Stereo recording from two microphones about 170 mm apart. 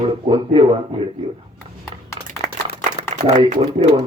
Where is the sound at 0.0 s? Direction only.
30° right (ahead or behind).